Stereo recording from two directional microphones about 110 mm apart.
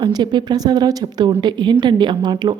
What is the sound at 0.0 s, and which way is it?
A woman's voice, 45° right (ahead or behind).